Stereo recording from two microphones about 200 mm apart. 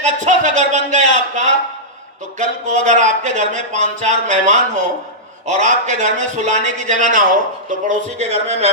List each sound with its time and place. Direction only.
0.0 s speech: 35° right (ahead or behind)